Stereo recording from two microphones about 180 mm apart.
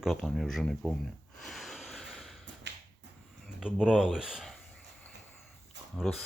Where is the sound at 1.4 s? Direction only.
Centre (ahead or behind).